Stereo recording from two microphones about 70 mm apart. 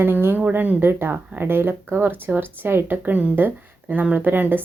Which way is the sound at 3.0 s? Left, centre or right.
Right.